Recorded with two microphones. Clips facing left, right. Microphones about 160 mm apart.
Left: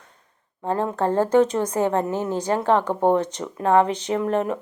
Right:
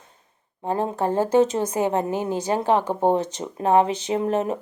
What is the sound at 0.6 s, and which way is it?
A woman's voice, 15° right (ahead or behind).